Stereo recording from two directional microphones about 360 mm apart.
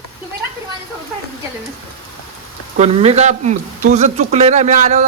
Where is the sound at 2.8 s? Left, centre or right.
Centre.